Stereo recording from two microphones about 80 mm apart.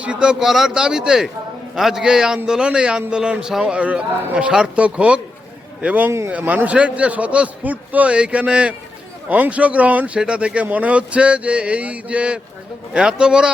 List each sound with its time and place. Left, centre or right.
0.0 s speech: centre
6.1 s speech: right
6.3 s speech: right